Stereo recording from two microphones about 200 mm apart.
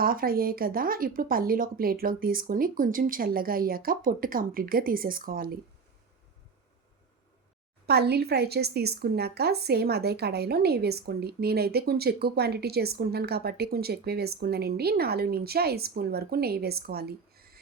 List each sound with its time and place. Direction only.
0.0 s a woman's voice: 45° right (ahead or behind)
7.9 s a woman's voice: 55° right (ahead or behind)